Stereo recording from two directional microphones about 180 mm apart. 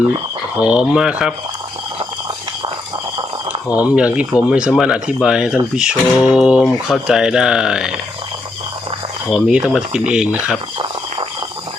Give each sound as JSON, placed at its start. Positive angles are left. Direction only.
{"t": 0.6, "sound": "speech", "side_deg": -5}
{"t": 3.7, "sound": "speech", "side_deg": -5}
{"t": 9.3, "sound": "speech", "side_deg": -5}